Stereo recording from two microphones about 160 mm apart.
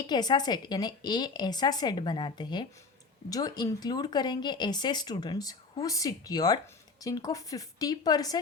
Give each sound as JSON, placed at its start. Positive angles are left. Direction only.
{"t": 0.0, "sound": "a woman's voice", "side_deg": 25}